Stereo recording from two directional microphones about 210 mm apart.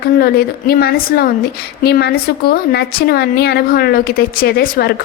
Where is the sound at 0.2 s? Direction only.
50° left (ahead or behind).